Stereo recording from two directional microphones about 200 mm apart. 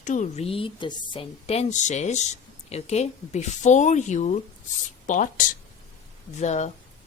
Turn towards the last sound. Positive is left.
turn(degrees=35)  # may be behind; listen again after turning